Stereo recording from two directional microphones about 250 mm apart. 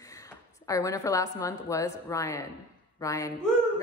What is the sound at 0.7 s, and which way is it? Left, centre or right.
A woman's voice, centre.